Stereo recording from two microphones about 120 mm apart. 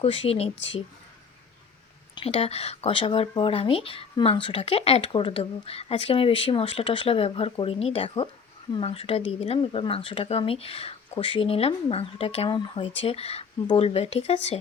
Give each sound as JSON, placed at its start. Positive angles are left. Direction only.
{"t": 0.0, "sound": "speech", "side_deg": 55}
{"t": 2.1, "sound": "speech", "side_deg": 55}